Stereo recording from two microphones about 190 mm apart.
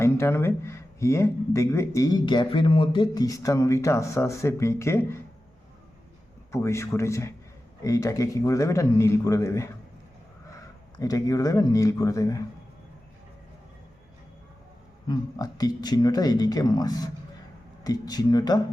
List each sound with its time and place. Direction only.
0.0 s speech: 15° left (ahead or behind)
6.5 s speech: 15° left (ahead or behind)
11.0 s speech: 20° left (ahead or behind)
15.0 s speech: 20° left (ahead or behind)